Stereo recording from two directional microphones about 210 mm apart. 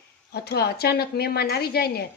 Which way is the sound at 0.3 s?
50° left (ahead or behind).